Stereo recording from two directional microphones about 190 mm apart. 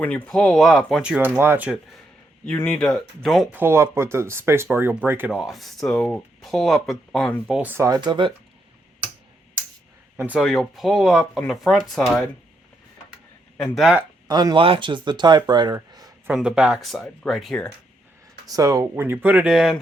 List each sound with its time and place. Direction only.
0.0 s speech: 5° left (ahead or behind)
2.5 s speech: 10° left (ahead or behind)
3.6 s speech: 15° right (ahead or behind); by 7.5 s 5° left (ahead or behind)
7.5 s speech: 10° right (ahead or behind)
10.2 s speech: 5° right (ahead or behind)
13.6 s speech: centre (ahead or behind)
14.3 s speech: 20° right (ahead or behind)
16.3 s speech: 5° right (ahead or behind)
18.4 s speech: 20° right (ahead or behind); by 19.8 s centre (ahead or behind)